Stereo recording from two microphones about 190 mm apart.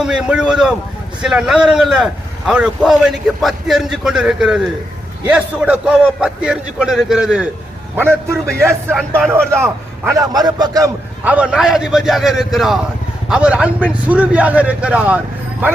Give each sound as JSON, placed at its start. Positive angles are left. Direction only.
{"t": 0.0, "sound": "a man's voice", "side_deg": -5}
{"t": 9.0, "sound": "a man's voice", "side_deg": 0}
{"t": 9.5, "sound": "a man's voice", "side_deg": -15}
{"t": 11.2, "sound": "a man's voice", "side_deg": -5}